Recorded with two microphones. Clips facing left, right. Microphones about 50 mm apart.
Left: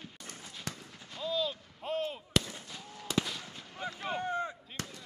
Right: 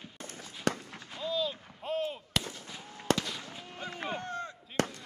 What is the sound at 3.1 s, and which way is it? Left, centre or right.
Fireworks, right.